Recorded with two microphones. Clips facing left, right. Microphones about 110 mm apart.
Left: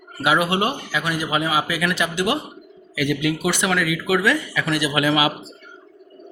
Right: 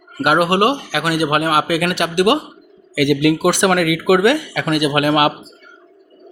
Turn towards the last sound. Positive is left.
turn(degrees=-55)  # may be behind; listen again after turning